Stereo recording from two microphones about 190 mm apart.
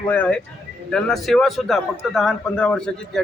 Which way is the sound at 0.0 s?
5° left (ahead or behind).